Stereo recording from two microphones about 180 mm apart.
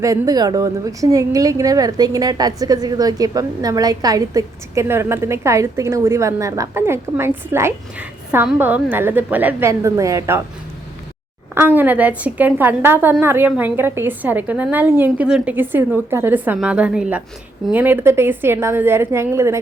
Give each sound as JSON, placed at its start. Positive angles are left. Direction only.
{"t": 0.0, "sound": "a woman's voice", "side_deg": -20}
{"t": 11.5, "sound": "a woman's voice", "side_deg": -10}